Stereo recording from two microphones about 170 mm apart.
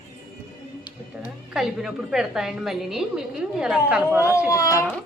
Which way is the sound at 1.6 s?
Centre (ahead or behind).